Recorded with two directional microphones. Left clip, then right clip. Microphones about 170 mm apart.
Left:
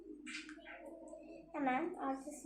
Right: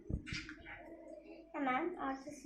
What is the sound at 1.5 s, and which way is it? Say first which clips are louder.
Speech: right 1 dB; 25° left (ahead or behind).